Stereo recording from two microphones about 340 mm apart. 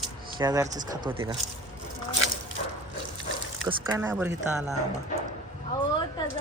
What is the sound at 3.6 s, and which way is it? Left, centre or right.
Speech, centre.